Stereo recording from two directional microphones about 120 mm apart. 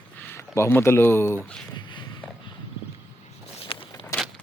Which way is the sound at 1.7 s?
40° left (ahead or behind).